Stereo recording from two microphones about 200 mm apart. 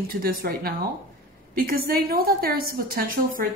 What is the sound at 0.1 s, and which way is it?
A woman's voice, 45° right (ahead or behind).